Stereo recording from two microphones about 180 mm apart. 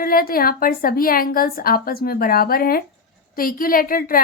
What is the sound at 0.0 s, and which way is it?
A woman's voice, 55° left (ahead or behind).